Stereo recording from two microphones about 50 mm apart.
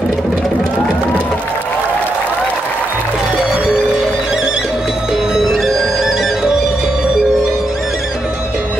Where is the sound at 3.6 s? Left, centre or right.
Centre.